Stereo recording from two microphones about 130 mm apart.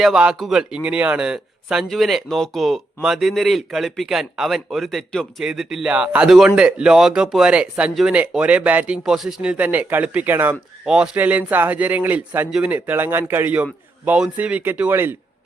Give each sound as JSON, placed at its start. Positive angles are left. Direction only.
{"t": 0.0, "sound": "a man's voice", "side_deg": -5}